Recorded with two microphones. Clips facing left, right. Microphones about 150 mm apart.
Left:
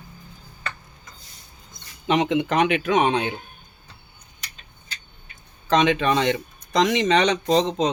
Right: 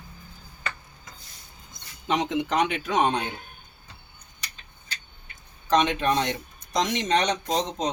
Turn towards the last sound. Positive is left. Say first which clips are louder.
# left 7 dB
turn(degrees=75)  # may be behind; listen again after turning